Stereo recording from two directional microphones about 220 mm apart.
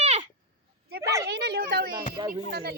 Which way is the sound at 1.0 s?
15° right (ahead or behind).